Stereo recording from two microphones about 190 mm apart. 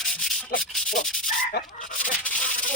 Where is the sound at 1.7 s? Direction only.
45° left (ahead or behind).